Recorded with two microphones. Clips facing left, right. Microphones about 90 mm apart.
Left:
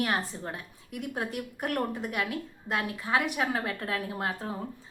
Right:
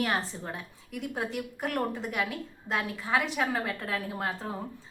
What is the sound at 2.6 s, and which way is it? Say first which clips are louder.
A woman's voice: even; 5° left (ahead or behind).